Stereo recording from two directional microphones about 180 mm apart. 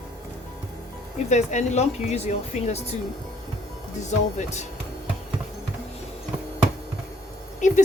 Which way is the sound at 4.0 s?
40° left (ahead or behind).